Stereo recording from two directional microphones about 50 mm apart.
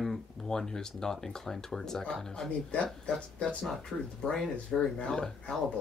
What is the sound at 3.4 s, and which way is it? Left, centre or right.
Speech, centre.